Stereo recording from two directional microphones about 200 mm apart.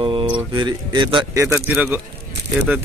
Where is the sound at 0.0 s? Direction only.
25° right (ahead or behind).